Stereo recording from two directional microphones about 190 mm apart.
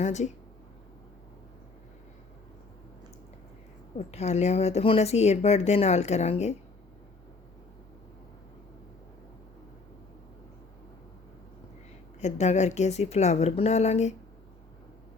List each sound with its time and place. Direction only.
0.0 s speech: 40° left (ahead or behind)
3.9 s speech: 35° left (ahead or behind)
12.2 s speech: 35° left (ahead or behind)